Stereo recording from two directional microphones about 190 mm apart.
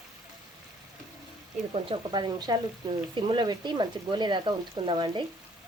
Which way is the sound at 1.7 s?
25° right (ahead or behind).